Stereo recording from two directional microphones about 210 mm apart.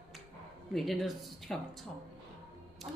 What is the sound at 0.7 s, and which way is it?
Speech, centre (ahead or behind).